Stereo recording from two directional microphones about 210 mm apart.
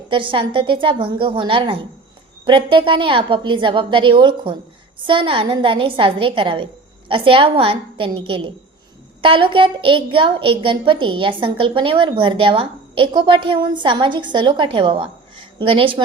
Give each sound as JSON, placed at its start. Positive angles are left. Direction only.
{"t": 0.1, "sound": "a woman's voice", "side_deg": -25}